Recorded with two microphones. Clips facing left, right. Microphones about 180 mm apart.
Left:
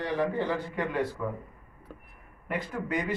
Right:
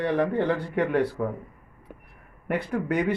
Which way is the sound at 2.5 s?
65° right (ahead or behind).